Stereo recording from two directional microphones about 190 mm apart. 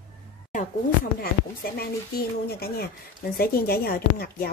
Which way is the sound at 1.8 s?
55° left (ahead or behind).